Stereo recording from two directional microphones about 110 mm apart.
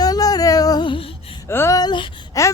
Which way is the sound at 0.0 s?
35° left (ahead or behind).